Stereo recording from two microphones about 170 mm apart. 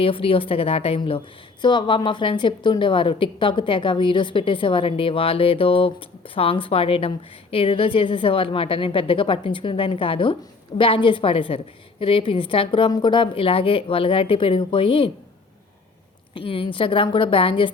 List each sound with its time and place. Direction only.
0.0 s a woman's voice: 30° left (ahead or behind)
16.3 s a woman's voice: 30° left (ahead or behind)